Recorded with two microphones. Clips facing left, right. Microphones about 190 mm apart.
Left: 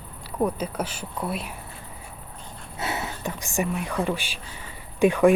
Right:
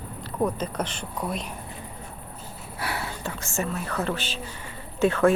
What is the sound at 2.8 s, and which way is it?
Speech, 20° left (ahead or behind).